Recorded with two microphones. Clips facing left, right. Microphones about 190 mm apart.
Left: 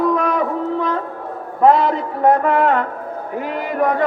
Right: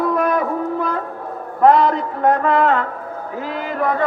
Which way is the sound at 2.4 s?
15° left (ahead or behind).